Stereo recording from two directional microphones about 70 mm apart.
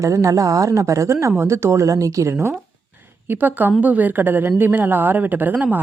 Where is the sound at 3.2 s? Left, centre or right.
Right.